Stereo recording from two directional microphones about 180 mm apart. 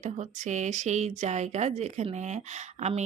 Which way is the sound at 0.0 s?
45° right (ahead or behind).